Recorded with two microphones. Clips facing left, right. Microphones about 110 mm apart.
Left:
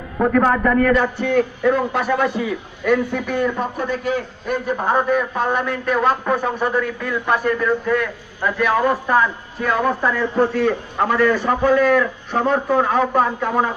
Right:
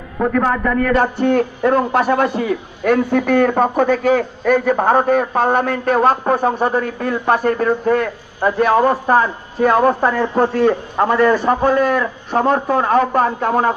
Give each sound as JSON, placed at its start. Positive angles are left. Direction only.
{"t": 0.9, "sound": "a man's voice", "side_deg": -50}
{"t": 4.7, "sound": "a man's voice", "side_deg": -50}
{"t": 11.0, "sound": "a man's voice", "side_deg": -40}